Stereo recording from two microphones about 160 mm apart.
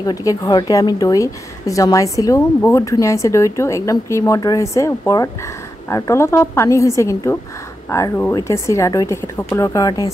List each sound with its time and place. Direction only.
0.0 s a woman's voice: 20° left (ahead or behind)